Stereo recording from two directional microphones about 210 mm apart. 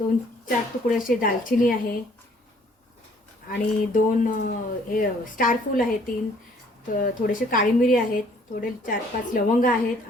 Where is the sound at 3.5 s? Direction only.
40° left (ahead or behind).